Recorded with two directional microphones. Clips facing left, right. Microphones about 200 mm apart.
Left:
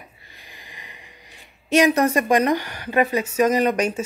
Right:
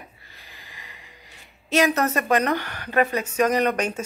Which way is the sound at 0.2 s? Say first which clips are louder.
Left 2 dB; 15° left (ahead or behind).